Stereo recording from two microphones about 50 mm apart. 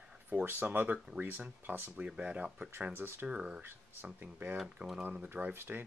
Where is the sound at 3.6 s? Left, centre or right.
Right.